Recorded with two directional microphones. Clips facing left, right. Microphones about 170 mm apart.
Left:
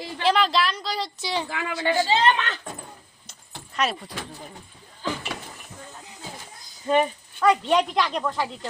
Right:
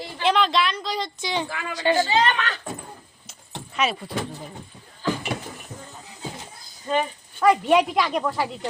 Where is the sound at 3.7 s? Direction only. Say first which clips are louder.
Right 1 dB; centre (ahead or behind).